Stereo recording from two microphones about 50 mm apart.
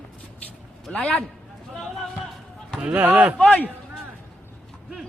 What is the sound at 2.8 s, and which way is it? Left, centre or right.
Speech, right.